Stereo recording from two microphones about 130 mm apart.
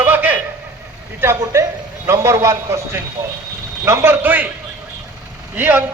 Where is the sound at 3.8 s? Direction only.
20° right (ahead or behind).